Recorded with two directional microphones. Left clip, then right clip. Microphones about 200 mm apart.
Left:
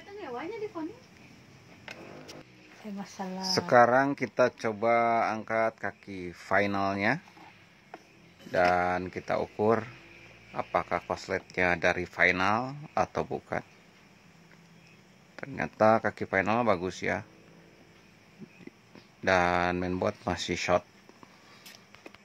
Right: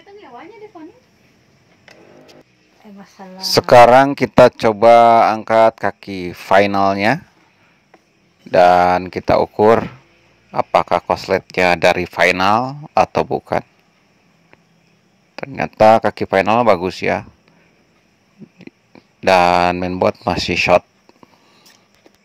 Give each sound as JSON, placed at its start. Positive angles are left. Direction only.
{"t": 3.2, "sound": "speech", "side_deg": 5}
{"t": 3.5, "sound": "speech", "side_deg": -45}
{"t": 8.5, "sound": "speech", "side_deg": -45}
{"t": 15.3, "sound": "speech", "side_deg": -40}
{"t": 19.2, "sound": "speech", "side_deg": -40}